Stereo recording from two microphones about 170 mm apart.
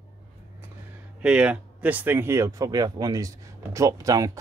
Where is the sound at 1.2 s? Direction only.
5° right (ahead or behind).